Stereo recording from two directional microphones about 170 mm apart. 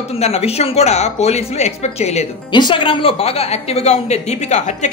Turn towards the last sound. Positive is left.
turn(degrees=45)  # may be behind; listen again after turning